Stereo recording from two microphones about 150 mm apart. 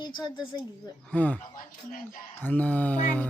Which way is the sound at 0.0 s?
30° left (ahead or behind).